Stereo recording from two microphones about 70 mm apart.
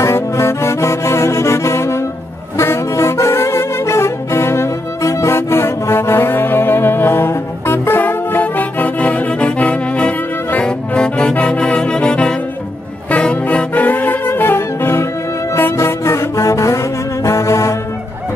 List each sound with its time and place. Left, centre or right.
0.0 s music: left; by 12.4 s centre
13.1 s saxophone: centre; by 15.0 s left
15.5 s music: left